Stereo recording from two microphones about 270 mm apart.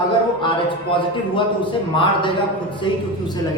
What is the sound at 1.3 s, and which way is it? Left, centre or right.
Speech, centre.